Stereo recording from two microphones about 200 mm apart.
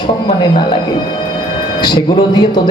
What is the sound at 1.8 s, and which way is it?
Speech, 20° left (ahead or behind).